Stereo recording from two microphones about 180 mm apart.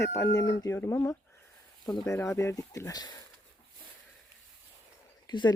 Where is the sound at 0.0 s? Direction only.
15° left (ahead or behind).